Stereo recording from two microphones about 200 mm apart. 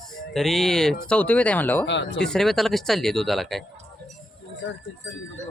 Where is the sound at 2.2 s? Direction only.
Centre (ahead or behind).